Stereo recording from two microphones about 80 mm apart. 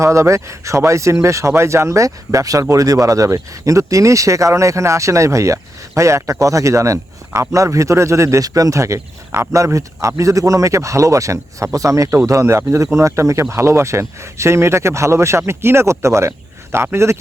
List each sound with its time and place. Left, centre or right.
0.0 s speech: right